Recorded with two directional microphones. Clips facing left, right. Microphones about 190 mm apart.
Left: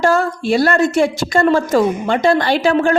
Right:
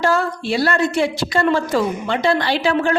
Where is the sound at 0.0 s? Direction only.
45° left (ahead or behind).